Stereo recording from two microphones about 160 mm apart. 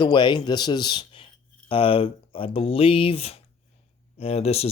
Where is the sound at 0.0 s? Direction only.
30° left (ahead or behind).